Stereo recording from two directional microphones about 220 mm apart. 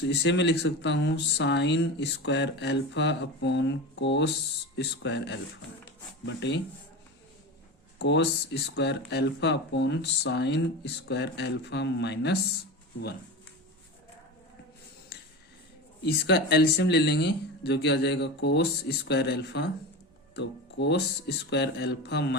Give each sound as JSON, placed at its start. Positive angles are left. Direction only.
{"t": 0.1, "sound": "speech", "side_deg": 50}
{"t": 5.8, "sound": "a sound", "side_deg": 55}
{"t": 7.9, "sound": "speech", "side_deg": 50}
{"t": 16.0, "sound": "speech", "side_deg": 50}